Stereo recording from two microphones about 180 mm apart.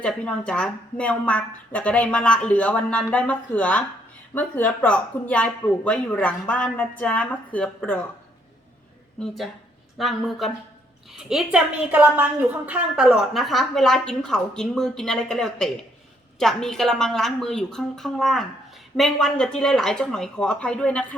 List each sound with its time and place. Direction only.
0.0 s a woman's voice: 5° left (ahead or behind)
9.1 s a woman's voice: centre (ahead or behind)